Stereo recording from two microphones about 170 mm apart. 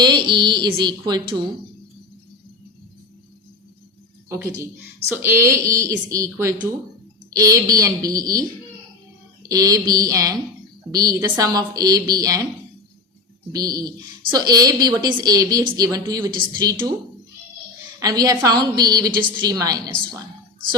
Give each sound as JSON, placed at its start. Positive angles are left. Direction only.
{"t": 0.0, "sound": "speech", "side_deg": -25}
{"t": 4.3, "sound": "a woman's voice", "side_deg": -15}
{"t": 13.5, "sound": "a woman's voice", "side_deg": -20}
{"t": 18.0, "sound": "a woman's voice", "side_deg": -20}